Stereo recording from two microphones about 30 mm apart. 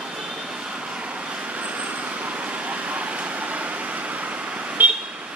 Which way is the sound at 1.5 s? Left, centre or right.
Right.